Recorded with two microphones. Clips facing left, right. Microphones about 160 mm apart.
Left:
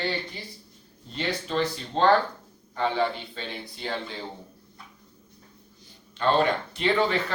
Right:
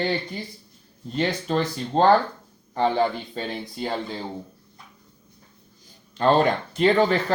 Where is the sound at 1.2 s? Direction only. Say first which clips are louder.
Right 4 dB; 45° right (ahead or behind).